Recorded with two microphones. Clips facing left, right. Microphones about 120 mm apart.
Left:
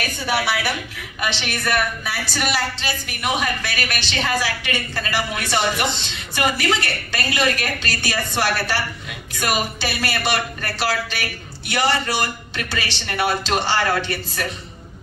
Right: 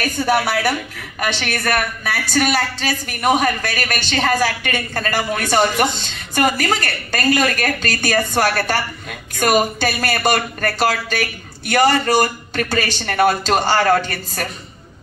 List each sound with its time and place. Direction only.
0.0 s a woman's voice: 45° right (ahead or behind)